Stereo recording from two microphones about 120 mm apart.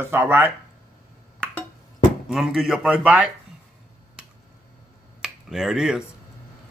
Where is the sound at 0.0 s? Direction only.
20° right (ahead or behind).